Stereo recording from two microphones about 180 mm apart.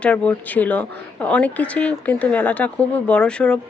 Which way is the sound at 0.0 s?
5° left (ahead or behind).